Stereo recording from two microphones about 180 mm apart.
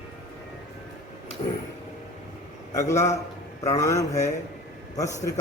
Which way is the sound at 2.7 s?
15° left (ahead or behind).